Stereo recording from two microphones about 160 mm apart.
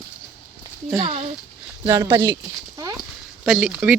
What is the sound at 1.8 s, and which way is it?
Speech, 20° right (ahead or behind).